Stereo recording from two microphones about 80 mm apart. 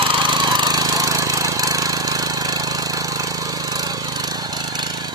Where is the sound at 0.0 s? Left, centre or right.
Right.